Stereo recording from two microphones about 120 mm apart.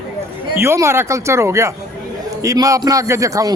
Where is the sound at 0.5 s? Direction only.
20° right (ahead or behind).